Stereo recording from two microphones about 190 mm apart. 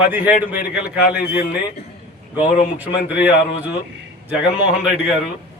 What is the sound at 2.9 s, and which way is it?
Speech, 60° left (ahead or behind).